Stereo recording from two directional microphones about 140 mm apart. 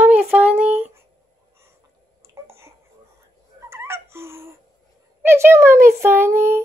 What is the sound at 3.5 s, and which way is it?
Turkey, 20° right (ahead or behind).